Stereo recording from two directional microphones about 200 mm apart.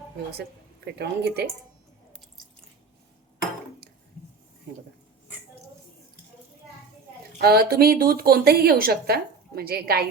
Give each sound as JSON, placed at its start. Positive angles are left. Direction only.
{"t": 0.9, "sound": "speech", "side_deg": -55}
{"t": 7.4, "sound": "a woman's voice", "side_deg": -50}